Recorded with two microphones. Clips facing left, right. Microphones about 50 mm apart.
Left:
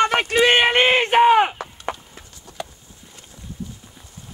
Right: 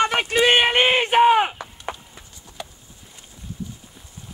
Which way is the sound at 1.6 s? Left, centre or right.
Left.